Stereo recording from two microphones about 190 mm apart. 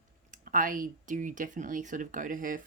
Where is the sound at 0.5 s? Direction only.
45° right (ahead or behind).